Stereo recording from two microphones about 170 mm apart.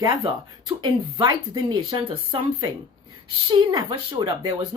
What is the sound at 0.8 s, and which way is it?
A woman's voice, 25° right (ahead or behind).